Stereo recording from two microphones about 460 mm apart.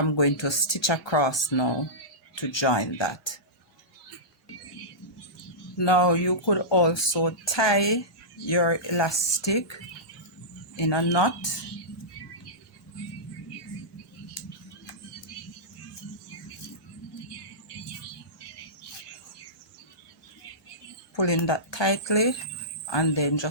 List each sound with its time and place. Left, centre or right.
0.2 s speech: left
5.7 s speech: left
10.8 s speech: left
21.2 s speech: left